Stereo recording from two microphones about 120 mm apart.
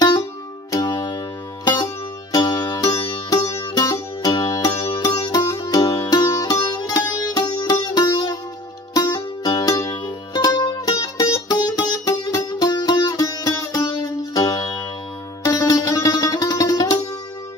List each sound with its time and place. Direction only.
0.7 s music: 35° left (ahead or behind)
2.3 s music: 30° left (ahead or behind)